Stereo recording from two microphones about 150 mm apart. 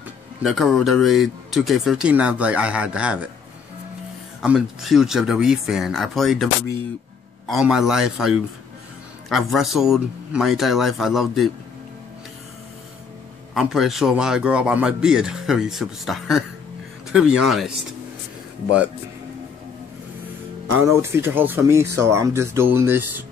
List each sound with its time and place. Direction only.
0.4 s speech: centre (ahead or behind)
4.4 s speech: 5° right (ahead or behind)
13.6 s speech: centre (ahead or behind)
20.8 s speech: 20° right (ahead or behind)